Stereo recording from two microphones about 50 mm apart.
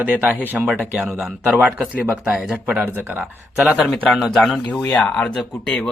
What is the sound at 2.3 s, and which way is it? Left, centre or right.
Speech, right.